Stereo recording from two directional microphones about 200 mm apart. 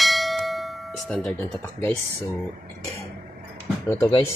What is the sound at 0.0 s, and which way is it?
Church bell, centre (ahead or behind).